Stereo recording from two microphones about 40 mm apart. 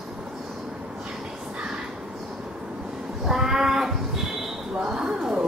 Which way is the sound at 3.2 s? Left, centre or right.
Centre.